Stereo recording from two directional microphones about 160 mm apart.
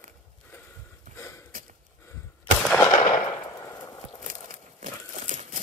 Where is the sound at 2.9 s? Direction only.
50° left (ahead or behind).